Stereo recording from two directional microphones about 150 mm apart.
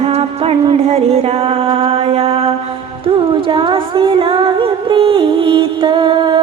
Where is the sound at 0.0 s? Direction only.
40° right (ahead or behind).